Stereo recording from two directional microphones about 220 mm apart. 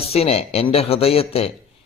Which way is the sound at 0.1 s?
25° left (ahead or behind).